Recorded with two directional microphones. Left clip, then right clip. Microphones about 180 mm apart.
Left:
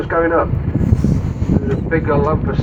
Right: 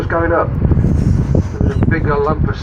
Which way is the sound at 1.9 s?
55° right (ahead or behind).